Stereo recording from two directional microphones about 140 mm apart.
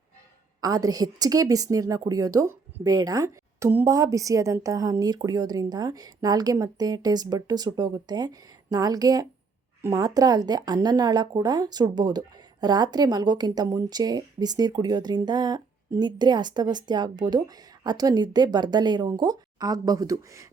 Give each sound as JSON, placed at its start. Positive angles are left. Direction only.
{"t": 0.6, "sound": "a woman's voice", "side_deg": -25}